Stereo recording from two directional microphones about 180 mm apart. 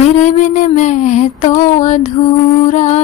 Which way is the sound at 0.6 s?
45° left (ahead or behind).